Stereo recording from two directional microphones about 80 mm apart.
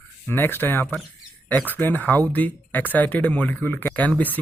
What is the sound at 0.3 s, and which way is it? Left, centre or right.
Speech, left.